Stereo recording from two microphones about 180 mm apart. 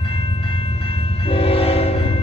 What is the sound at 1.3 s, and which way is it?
Train, 30° left (ahead or behind).